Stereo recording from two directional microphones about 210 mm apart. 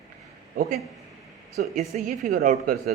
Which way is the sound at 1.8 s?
40° right (ahead or behind).